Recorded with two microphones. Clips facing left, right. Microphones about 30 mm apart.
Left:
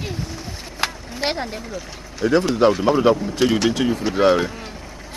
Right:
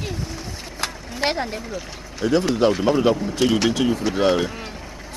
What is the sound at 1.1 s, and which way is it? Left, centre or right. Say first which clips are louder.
Speech: right 1 dB; centre.